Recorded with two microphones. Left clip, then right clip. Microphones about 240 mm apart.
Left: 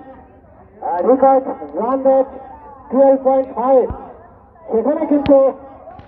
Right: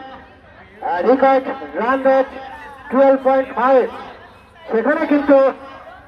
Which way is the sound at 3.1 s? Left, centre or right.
Right.